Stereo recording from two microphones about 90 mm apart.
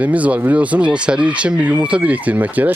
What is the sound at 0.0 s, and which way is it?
Speech, 15° right (ahead or behind).